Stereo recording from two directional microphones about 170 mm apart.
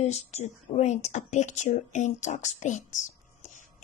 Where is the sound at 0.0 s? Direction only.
40° left (ahead or behind).